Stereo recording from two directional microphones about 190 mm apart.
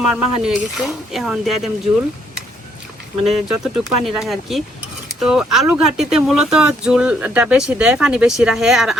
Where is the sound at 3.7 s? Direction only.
Centre (ahead or behind).